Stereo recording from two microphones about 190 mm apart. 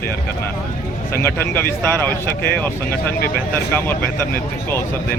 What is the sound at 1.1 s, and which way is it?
Speech, 10° left (ahead or behind).